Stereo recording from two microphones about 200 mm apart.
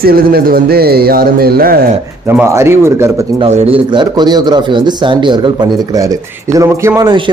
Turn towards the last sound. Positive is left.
turn(degrees=-20)  # may be behind; listen again after turning